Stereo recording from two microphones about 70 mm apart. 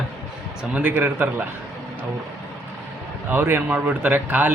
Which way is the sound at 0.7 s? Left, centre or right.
Right.